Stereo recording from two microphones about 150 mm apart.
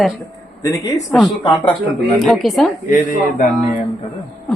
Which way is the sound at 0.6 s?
20° left (ahead or behind).